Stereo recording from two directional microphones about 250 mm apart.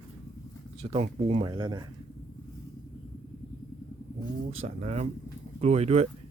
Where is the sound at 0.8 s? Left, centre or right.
Right.